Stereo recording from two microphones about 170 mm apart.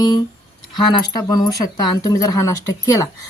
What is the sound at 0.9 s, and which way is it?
Speech, 25° left (ahead or behind).